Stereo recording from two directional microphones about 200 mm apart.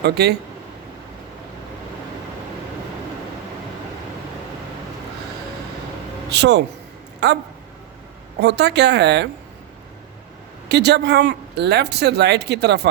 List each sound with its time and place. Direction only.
0.0 s speech: 55° right (ahead or behind)
6.3 s speech: 60° right (ahead or behind)
10.7 s speech: 55° right (ahead or behind)